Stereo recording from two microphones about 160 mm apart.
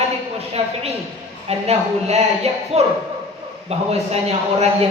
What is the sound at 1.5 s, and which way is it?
A woman's voice, 40° right (ahead or behind).